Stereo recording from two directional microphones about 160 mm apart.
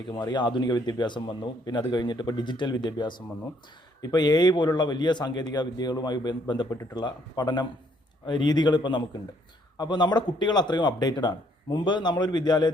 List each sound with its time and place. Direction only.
0.1 s a man's voice: 25° left (ahead or behind)